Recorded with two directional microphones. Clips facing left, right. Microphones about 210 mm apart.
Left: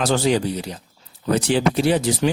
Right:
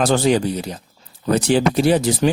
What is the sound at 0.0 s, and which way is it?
Speech, 50° right (ahead or behind).